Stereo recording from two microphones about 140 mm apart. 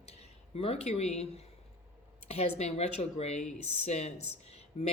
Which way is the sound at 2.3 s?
50° left (ahead or behind).